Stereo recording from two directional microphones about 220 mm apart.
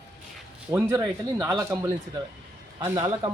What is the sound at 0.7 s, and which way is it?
A man's voice, 10° right (ahead or behind).